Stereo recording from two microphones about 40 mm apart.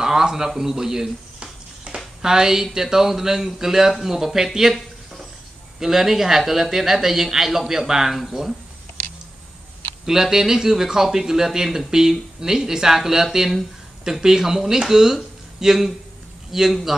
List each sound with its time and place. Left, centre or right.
0.0 s a sound: centre
0.5 s speech: centre
1.9 s a sound: right
2.2 s speech: centre
5.8 s speech: centre
10.0 s speech: centre